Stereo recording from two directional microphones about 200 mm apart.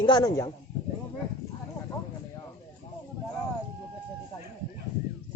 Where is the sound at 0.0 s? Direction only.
20° left (ahead or behind).